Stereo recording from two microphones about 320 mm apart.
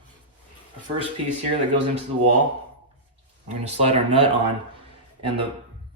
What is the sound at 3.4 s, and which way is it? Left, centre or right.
Speech, right.